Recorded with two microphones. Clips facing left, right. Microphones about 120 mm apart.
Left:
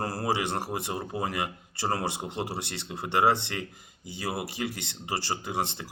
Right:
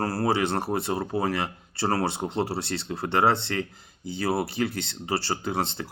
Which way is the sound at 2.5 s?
15° left (ahead or behind).